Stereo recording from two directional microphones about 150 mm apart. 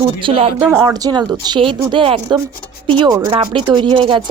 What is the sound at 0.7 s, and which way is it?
Speech, 20° right (ahead or behind).